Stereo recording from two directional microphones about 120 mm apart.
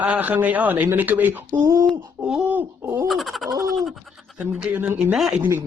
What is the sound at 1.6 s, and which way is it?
Speech, 25° right (ahead or behind).